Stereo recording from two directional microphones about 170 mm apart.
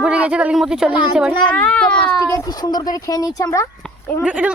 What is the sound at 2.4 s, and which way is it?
Speech, 20° left (ahead or behind).